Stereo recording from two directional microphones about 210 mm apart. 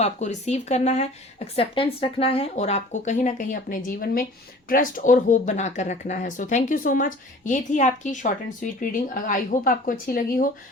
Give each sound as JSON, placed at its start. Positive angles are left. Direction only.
{"t": 0.0, "sound": "speech", "side_deg": 30}